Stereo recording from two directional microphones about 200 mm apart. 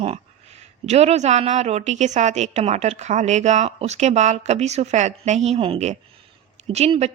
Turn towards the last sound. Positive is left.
turn(degrees=-30)  # may be behind; listen again after turning